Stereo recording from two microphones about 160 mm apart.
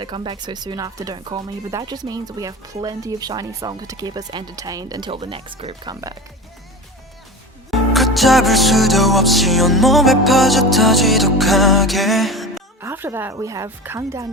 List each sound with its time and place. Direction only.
0.0 s speech: 30° right (ahead or behind)
5.9 s speech: 20° right (ahead or behind)
7.7 s music: centre (ahead or behind)
12.8 s speech: 15° right (ahead or behind)